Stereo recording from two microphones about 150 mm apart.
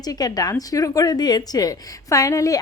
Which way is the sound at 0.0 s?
25° left (ahead or behind).